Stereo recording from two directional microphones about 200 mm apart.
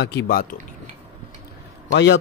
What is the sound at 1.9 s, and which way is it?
Speech, 60° left (ahead or behind).